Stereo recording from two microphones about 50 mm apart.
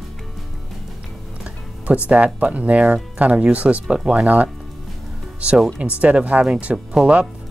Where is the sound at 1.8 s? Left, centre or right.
Right.